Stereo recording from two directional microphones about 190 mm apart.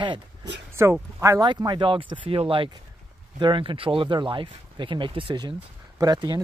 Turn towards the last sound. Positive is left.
turn(degrees=-20)  # may be behind; listen again after turning